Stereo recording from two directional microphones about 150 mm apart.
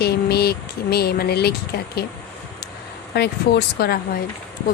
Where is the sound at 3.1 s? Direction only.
90° left.